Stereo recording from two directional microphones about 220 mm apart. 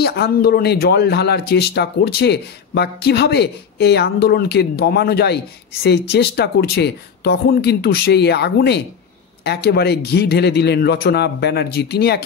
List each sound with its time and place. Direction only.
0.0 s speech: 50° left (ahead or behind)